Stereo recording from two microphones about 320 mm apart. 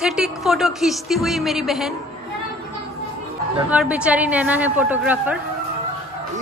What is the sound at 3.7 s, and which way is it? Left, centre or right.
A woman's voice, centre.